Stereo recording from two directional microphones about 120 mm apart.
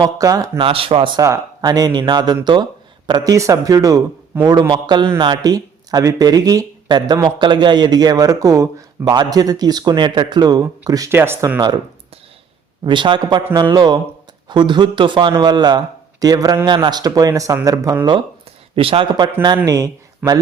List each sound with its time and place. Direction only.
0.0 s speech: 30° right (ahead or behind)
0.6 s speech: 50° right (ahead or behind)
1.2 s speech: 30° right (ahead or behind)
11.1 s speech: 20° right (ahead or behind)
12.8 s speech: 40° right (ahead or behind)
18.8 s speech: 50° right (ahead or behind)
19.1 s speech: 35° right (ahead or behind)